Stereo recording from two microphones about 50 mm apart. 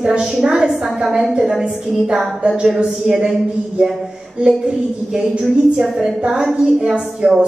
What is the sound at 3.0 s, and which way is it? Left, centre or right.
Speech, centre.